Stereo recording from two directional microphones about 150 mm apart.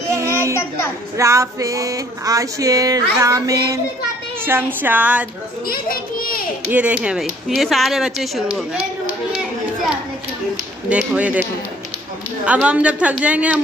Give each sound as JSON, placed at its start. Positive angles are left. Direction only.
{"t": 0.2, "sound": "child singing", "side_deg": -20}
{"t": 1.1, "sound": "a sound", "side_deg": -20}
{"t": 4.5, "sound": "a woman's voice", "side_deg": -15}
{"t": 5.7, "sound": "a child's voice", "side_deg": 75}
{"t": 6.7, "sound": "speech", "side_deg": -10}
{"t": 10.9, "sound": "a woman's voice", "side_deg": -10}
{"t": 12.4, "sound": "a woman's voice", "side_deg": -10}